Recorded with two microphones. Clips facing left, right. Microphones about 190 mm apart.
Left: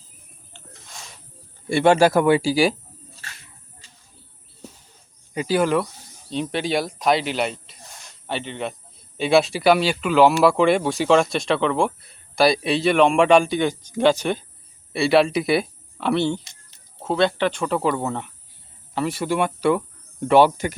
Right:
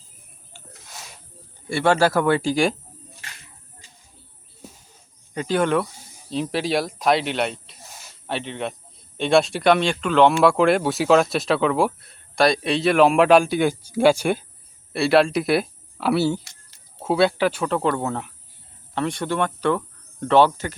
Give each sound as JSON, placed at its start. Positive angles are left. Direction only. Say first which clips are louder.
{"t": 0.5, "sound": "a sound", "louder": "right 1 dB", "side_deg": -5}
{"t": 1.7, "sound": "cricket", "louder": "left 3 dB", "side_deg": 20}
{"t": 5.3, "sound": "speech", "louder": "left 1 dB", "side_deg": 5}
{"t": 16.4, "sound": "a sound", "louder": "even", "side_deg": 20}
{"t": 17.0, "sound": "speech", "louder": "right 1 dB", "side_deg": -5}
{"t": 18.9, "sound": "cricket", "louder": "left 1 dB", "side_deg": 5}